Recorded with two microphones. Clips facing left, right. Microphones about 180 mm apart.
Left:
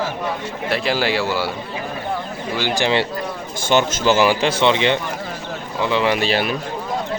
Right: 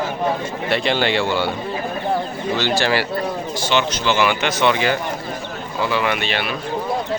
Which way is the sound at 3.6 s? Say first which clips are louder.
Left 4 dB; 50° left (ahead or behind).